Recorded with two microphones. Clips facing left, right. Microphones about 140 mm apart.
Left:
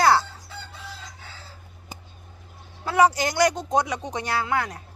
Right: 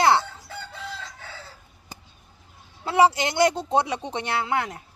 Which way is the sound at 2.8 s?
25° right (ahead or behind).